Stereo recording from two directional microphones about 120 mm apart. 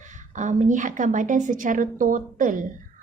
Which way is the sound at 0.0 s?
90° right.